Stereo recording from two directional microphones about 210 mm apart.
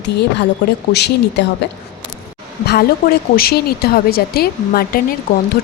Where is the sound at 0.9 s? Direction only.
50° left (ahead or behind).